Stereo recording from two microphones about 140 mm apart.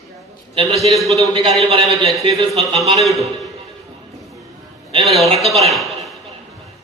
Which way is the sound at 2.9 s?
Centre (ahead or behind).